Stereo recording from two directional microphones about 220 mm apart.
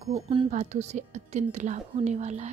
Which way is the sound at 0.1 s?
25° right (ahead or behind).